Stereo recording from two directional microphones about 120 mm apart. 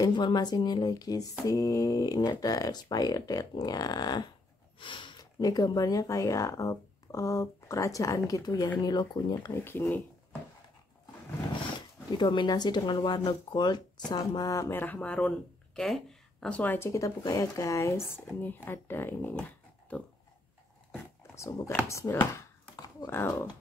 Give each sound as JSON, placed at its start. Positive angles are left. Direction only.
{"t": 0.0, "sound": "speech", "side_deg": 35}
{"t": 4.7, "sound": "a sound", "side_deg": 45}
{"t": 5.4, "sound": "speech", "side_deg": 30}
{"t": 9.5, "sound": "speech", "side_deg": 20}
{"t": 12.2, "sound": "speech", "side_deg": 40}
{"t": 21.2, "sound": "speech", "side_deg": 25}
{"t": 21.8, "sound": "a sound", "side_deg": 25}
{"t": 23.0, "sound": "speech", "side_deg": 20}